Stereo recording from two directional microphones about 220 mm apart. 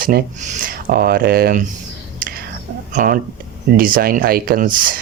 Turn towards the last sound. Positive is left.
turn(degrees=-40)  # may be behind; listen again after turning